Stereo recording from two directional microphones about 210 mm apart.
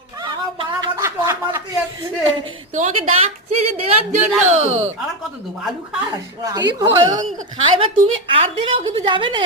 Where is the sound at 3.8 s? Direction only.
30° right (ahead or behind).